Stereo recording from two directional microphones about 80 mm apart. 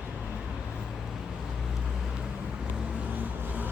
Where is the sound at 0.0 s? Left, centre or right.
Centre.